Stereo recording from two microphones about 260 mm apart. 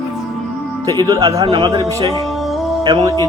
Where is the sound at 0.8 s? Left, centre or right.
Centre.